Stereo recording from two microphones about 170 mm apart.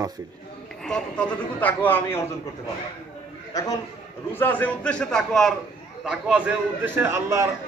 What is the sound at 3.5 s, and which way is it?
A man's voice, 20° left (ahead or behind).